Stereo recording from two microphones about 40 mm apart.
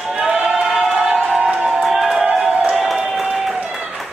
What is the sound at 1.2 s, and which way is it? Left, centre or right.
Music, centre.